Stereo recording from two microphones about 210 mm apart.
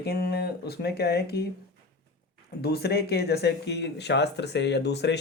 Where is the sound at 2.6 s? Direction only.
50° left (ahead or behind).